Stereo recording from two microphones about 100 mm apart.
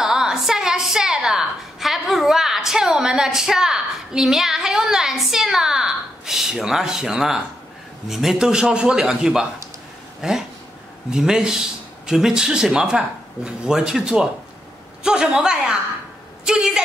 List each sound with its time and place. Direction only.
0.0 s a woman's voice: 5° right (ahead or behind)